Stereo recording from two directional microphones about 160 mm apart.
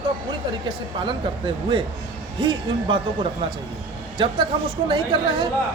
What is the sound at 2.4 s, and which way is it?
Speech, 30° right (ahead or behind).